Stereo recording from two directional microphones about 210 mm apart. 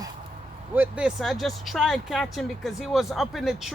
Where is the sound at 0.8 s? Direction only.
5° right (ahead or behind).